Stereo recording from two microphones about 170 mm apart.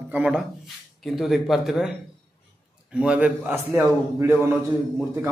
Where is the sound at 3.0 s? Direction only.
10° right (ahead or behind).